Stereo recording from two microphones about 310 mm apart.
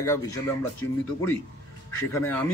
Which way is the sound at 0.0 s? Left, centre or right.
Centre.